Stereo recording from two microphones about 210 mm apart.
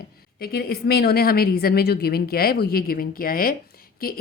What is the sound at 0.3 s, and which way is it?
Speech, 45° left (ahead or behind).